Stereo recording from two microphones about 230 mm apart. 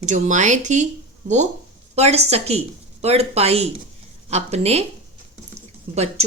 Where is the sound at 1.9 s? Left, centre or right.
Right.